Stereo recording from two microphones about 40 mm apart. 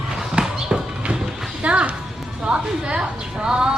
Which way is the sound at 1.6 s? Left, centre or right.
Right.